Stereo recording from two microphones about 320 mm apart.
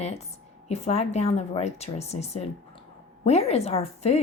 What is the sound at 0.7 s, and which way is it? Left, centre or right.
A woman's voice, centre.